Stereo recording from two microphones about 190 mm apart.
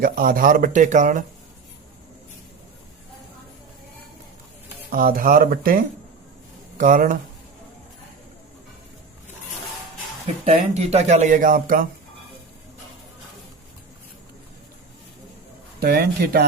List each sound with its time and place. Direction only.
0.0 s speech: 50° right (ahead or behind)
4.9 s speech: 50° right (ahead or behind)
10.4 s speech: 35° right (ahead or behind)
15.8 s speech: 55° right (ahead or behind)